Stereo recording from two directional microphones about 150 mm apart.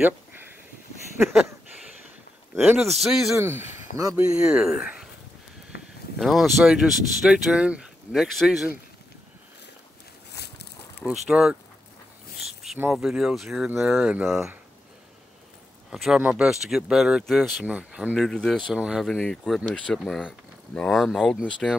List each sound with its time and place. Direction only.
1.3 s a sound: 5° right (ahead or behind)
2.5 s a man's voice: 15° right (ahead or behind)
2.8 s speech: centre (ahead or behind)
3.3 s speech: 20° right (ahead or behind)
4.2 s speech: 5° right (ahead or behind)
6.1 s speech: centre (ahead or behind)
10.3 s a sound: 90° left
11.1 s speech: 5° right (ahead or behind)
12.9 s speech: 5° right (ahead or behind)
15.9 s speech: centre (ahead or behind)